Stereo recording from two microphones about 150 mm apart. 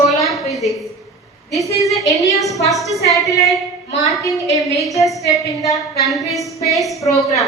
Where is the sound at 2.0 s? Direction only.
20° left (ahead or behind).